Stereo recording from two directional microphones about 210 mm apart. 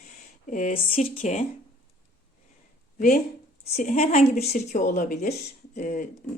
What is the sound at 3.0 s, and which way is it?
Speech, 40° left (ahead or behind).